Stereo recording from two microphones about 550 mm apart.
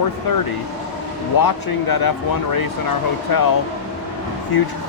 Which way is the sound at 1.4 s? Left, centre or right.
Left.